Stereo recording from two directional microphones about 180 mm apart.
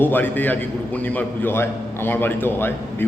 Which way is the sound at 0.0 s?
10° left (ahead or behind).